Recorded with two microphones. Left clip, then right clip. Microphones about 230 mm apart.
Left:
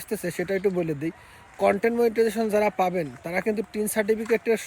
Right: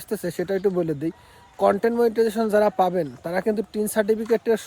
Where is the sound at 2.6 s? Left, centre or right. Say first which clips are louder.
Right 4 dB; centre.